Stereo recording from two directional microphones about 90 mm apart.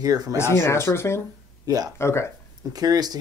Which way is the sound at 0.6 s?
30° left (ahead or behind).